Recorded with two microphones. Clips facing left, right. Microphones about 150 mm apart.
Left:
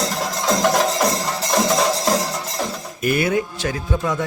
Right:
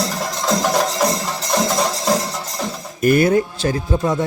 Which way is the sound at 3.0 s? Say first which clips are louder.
Right 5 dB; 40° right (ahead or behind).